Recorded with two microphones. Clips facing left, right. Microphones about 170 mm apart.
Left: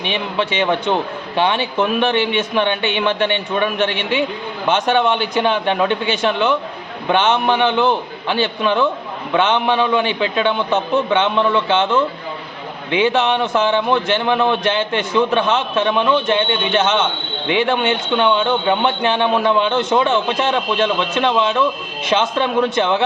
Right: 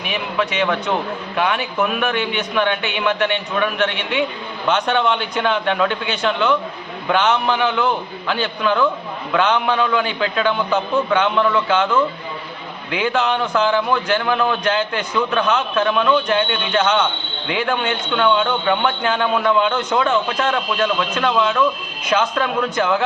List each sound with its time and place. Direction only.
0.0 s a man's voice: 25° left (ahead or behind)
4.9 s a man's voice: 20° left (ahead or behind)